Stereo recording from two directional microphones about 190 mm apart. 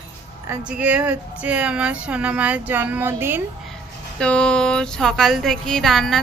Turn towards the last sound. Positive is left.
turn(degrees=0)  # may be behind; listen again after turning